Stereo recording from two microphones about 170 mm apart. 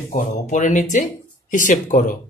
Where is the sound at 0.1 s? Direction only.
45° left (ahead or behind).